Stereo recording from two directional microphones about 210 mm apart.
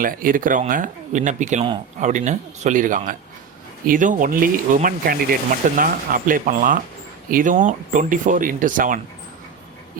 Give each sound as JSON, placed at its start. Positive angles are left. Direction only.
{"t": 0.0, "sound": "speech", "side_deg": -40}